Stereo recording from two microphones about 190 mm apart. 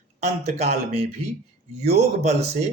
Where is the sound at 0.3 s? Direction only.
35° right (ahead or behind).